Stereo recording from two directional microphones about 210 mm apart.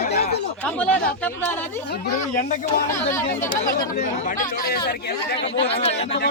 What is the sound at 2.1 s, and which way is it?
Speech, 35° left (ahead or behind).